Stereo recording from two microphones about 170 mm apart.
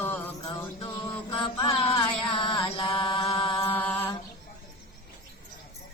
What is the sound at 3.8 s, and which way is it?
Mantra, 10° left (ahead or behind).